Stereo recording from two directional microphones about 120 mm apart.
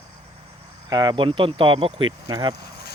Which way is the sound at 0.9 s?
35° right (ahead or behind).